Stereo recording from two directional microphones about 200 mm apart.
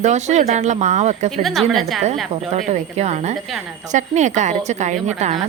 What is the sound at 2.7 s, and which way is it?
Speech, 35° right (ahead or behind).